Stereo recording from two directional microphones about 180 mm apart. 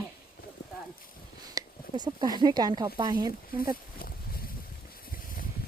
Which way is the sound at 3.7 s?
55° left (ahead or behind).